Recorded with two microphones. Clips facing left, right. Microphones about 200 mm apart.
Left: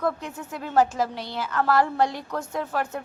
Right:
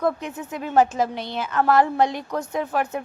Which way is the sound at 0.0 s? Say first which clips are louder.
Right 3 dB; 20° right (ahead or behind).